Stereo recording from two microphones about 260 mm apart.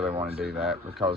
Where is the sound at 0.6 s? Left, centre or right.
Centre.